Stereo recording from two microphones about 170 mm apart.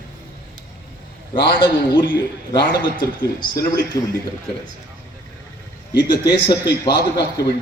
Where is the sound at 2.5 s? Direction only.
30° left (ahead or behind).